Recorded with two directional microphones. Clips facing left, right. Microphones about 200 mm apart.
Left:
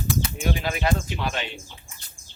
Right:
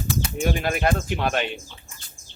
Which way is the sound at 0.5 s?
50° right (ahead or behind).